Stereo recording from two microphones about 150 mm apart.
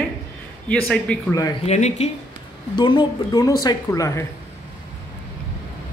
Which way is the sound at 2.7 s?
35° left (ahead or behind).